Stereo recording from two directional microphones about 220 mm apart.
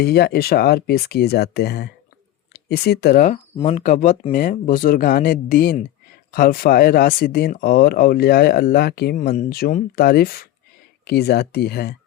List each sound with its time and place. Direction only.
0.0 s speech: 45° left (ahead or behind)